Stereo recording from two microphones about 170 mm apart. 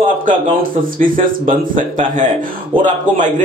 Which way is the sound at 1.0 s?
50° right (ahead or behind).